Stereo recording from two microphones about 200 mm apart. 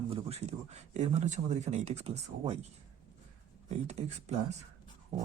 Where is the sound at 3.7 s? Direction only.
35° right (ahead or behind).